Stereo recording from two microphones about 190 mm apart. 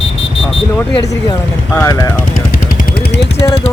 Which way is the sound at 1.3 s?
15° left (ahead or behind).